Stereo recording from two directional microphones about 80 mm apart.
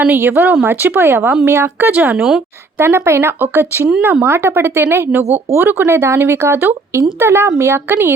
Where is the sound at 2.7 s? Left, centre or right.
Right.